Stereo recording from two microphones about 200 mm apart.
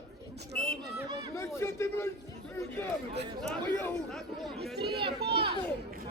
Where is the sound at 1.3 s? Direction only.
10° left (ahead or behind).